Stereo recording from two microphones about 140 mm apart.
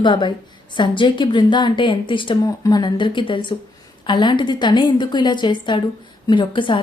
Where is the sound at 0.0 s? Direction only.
35° left (ahead or behind).